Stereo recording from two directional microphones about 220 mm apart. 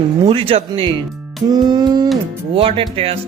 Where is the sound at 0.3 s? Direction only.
25° right (ahead or behind).